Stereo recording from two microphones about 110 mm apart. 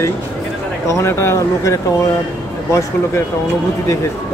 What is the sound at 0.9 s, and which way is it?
Speech, 25° left (ahead or behind).